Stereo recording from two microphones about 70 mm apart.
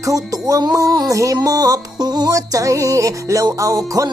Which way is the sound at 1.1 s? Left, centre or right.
Right.